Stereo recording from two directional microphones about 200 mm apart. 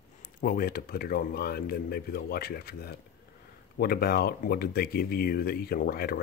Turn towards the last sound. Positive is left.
turn(degrees=50)  # may be behind; listen again after turning